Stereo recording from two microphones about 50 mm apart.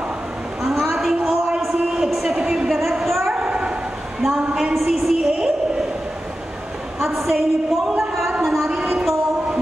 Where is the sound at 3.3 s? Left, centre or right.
Right.